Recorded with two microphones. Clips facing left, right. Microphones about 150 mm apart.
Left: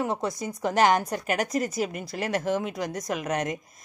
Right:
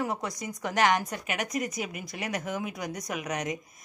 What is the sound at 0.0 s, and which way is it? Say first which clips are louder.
A woman's voice: left 4 dB; 25° left (ahead or behind).